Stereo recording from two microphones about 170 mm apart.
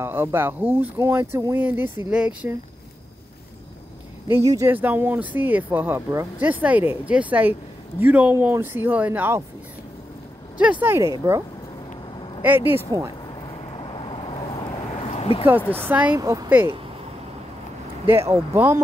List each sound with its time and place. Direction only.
0.0 s speech: 15° right (ahead or behind)
4.5 s speech: 15° right (ahead or behind)
10.6 s speech: 10° right (ahead or behind)
12.4 s speech: 10° right (ahead or behind)
13.3 s vehicle: 30° left (ahead or behind)
15.0 s a sound: 35° left (ahead or behind)
15.7 s speech: 10° right (ahead or behind)
16.2 s speech: 20° right (ahead or behind)
18.0 s speech: 15° right (ahead or behind)